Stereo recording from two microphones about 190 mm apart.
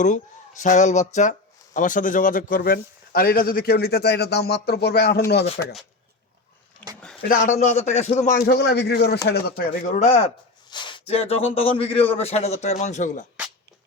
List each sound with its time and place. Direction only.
0.0 s speech: 40° left (ahead or behind); by 5.2 s 55° left (ahead or behind)
7.3 s speech: 45° left (ahead or behind); by 9.1 s 60° left (ahead or behind)
9.3 s speech: 45° left (ahead or behind)